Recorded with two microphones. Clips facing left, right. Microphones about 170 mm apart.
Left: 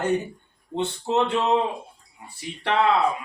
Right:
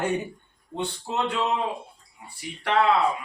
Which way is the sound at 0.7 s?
25° left (ahead or behind).